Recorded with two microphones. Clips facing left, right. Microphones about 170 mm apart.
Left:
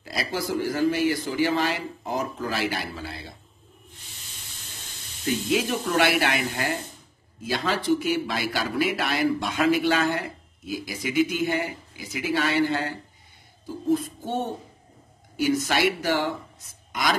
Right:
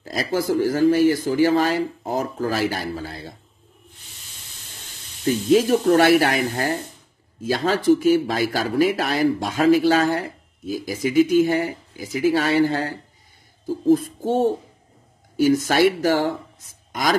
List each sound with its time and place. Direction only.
0.0 s speech: 40° right (ahead or behind)
5.2 s speech: 40° right (ahead or behind)